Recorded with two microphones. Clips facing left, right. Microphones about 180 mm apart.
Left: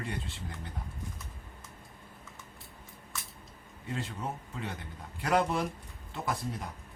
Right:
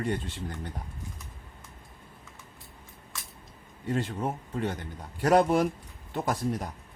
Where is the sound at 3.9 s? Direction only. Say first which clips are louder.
Right 7 dB; 45° right (ahead or behind).